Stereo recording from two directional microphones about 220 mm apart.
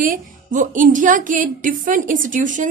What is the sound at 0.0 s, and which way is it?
Speech, 40° right (ahead or behind).